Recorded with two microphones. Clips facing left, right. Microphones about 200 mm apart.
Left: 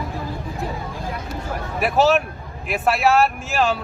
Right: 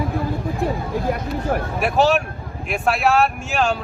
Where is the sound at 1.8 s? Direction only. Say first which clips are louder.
Left 1 dB; centre (ahead or behind).